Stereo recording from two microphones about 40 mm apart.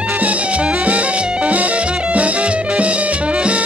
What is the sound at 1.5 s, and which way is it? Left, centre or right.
Music, right.